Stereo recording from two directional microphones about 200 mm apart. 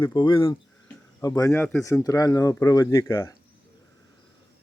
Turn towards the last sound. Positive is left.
turn(degrees=15)  # may be behind; listen again after turning